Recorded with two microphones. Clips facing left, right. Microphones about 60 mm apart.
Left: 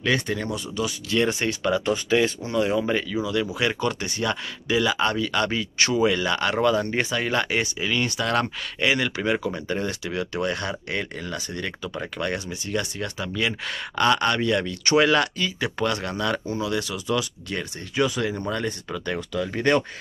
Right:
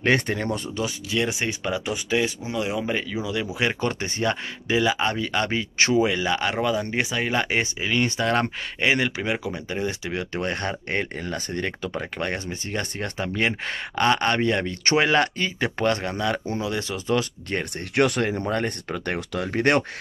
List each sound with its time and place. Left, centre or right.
0.0 s speech: right
0.8 s speech: right
1.4 s speech: centre
2.9 s speech: centre; by 17.6 s right
17.9 s speech: right
18.5 s speech: right